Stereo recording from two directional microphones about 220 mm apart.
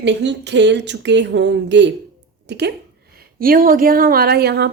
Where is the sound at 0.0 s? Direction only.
50° right (ahead or behind).